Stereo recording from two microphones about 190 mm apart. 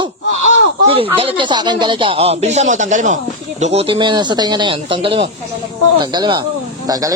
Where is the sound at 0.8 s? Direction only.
30° right (ahead or behind).